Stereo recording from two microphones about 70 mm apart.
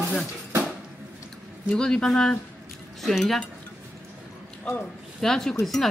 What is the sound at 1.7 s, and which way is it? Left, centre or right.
A woman's voice, centre.